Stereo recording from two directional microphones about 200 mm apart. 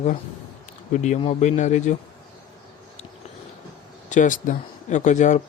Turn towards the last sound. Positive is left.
turn(degrees=35)  # may be behind; listen again after turning